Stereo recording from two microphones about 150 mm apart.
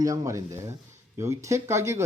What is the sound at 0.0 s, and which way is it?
Speech, 20° right (ahead or behind).